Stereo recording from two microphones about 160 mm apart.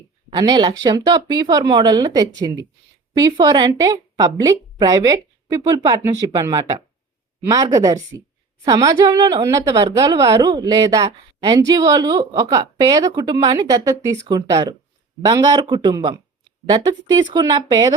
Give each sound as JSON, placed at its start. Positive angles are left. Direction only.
{"t": 0.3, "sound": "a woman's voice", "side_deg": -25}